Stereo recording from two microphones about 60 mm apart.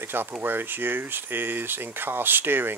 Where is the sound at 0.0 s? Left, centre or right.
Right.